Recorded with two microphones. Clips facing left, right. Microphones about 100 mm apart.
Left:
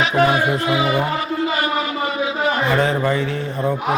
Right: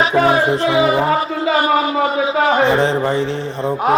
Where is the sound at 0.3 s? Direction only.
30° right (ahead or behind).